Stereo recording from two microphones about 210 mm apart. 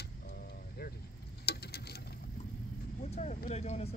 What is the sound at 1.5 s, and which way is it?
Patter, 50° left (ahead or behind).